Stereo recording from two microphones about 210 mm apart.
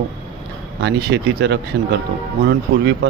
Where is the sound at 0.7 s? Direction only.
55° right (ahead or behind).